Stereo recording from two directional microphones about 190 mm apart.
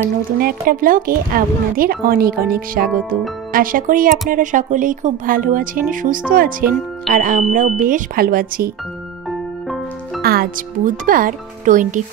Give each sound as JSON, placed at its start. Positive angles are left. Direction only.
{"t": 0.4, "sound": "speech", "side_deg": -50}
{"t": 10.2, "sound": "speech", "side_deg": -50}